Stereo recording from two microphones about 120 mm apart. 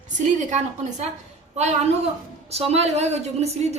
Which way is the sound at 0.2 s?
80° right.